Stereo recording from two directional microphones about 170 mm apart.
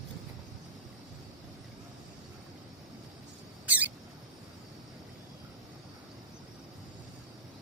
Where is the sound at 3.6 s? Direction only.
10° right (ahead or behind).